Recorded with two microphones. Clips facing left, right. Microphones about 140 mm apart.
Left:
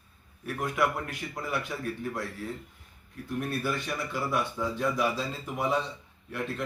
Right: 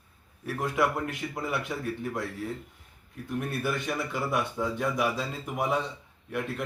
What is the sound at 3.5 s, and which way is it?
Speech, 20° right (ahead or behind).